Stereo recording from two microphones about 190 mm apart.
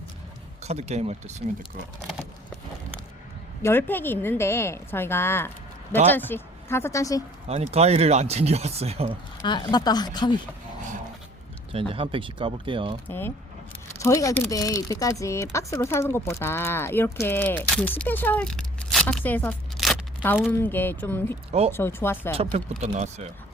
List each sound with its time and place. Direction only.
0.6 s speech: 35° right (ahead or behind)
2.0 s speech: centre (ahead or behind)
3.6 s speech: 10° left (ahead or behind)
7.4 s speech: 35° right (ahead or behind)
9.4 s speech: 25° left (ahead or behind)
11.7 s speech: 30° right (ahead or behind)
13.1 s speech: 10° left (ahead or behind)
22.8 s speech: 35° right (ahead or behind)